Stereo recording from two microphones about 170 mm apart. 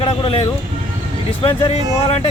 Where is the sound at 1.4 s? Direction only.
35° left (ahead or behind).